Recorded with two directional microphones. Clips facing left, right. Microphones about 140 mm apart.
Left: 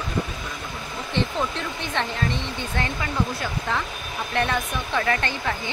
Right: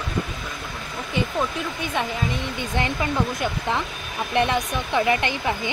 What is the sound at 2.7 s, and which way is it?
Speech, 20° right (ahead or behind).